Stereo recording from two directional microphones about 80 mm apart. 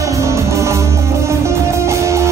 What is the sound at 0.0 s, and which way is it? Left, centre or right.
Music, right.